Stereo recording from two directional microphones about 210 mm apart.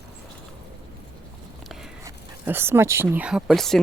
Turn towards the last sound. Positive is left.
turn(degrees=0)  # may be behind; listen again after turning